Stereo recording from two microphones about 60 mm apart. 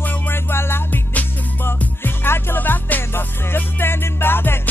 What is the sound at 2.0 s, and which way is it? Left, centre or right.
Music, left.